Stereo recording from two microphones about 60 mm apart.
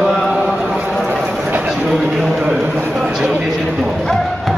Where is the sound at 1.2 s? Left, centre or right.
Right.